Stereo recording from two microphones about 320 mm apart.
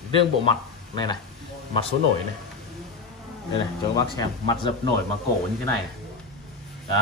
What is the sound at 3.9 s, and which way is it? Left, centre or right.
Speech, centre.